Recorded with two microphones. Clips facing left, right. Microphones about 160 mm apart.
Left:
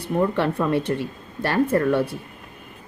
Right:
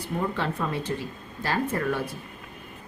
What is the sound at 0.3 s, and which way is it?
A woman's voice, 65° left (ahead or behind).